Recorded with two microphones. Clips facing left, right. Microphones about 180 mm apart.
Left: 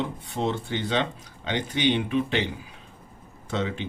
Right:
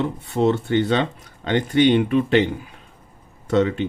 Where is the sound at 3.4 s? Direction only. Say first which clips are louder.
Right 10 dB; 55° right (ahead or behind).